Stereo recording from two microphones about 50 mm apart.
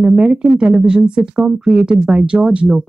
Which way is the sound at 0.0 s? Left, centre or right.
Centre.